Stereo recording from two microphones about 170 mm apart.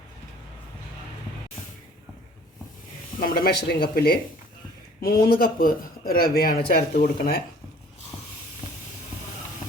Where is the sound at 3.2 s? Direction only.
60° left (ahead or behind).